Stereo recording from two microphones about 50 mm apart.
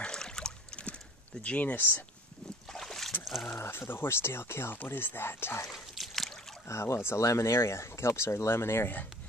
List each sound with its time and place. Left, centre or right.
0.0 s boat: centre
1.4 s speech: left
2.7 s boat: centre
3.3 s speech: centre
3.5 s speech: left
5.7 s a sound: centre
6.7 s speech: left
7.2 s speech: left
8.5 s speech: left